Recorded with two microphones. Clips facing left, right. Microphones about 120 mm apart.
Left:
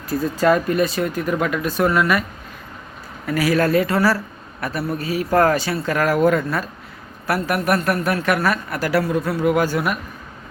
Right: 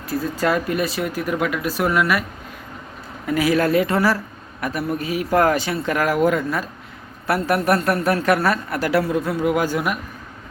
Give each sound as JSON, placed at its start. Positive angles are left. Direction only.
{"t": 0.1, "sound": "speech", "side_deg": 0}
{"t": 3.2, "sound": "a man's voice", "side_deg": -20}
{"t": 7.3, "sound": "speech", "side_deg": -25}